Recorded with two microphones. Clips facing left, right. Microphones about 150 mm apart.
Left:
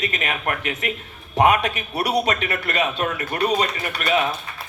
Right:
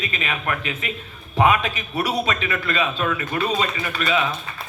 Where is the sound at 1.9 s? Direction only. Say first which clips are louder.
Left 1 dB; 65° left (ahead or behind).